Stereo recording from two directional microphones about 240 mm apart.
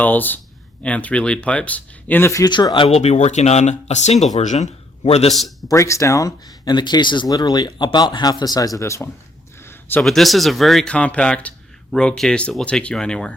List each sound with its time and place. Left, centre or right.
0.0 s speech: centre; by 5.3 s left
5.3 s speech: centre
5.6 s speech: centre